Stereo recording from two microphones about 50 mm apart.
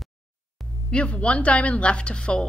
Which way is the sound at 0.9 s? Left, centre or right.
Left.